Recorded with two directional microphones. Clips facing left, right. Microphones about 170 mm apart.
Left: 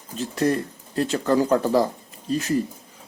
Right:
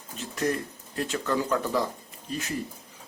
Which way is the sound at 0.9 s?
35° left (ahead or behind).